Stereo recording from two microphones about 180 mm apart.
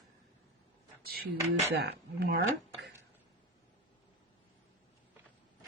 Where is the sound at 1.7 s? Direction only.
65° right (ahead or behind).